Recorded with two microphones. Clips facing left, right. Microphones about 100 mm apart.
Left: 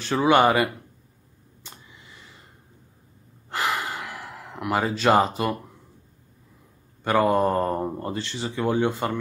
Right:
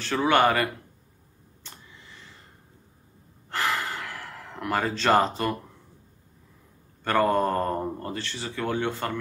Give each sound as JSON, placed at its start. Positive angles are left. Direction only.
{"t": 0.0, "sound": "speech", "side_deg": 15}
{"t": 1.6, "sound": "a sound", "side_deg": 15}
{"t": 3.4, "sound": "gasp", "side_deg": 15}
{"t": 7.0, "sound": "speech", "side_deg": 10}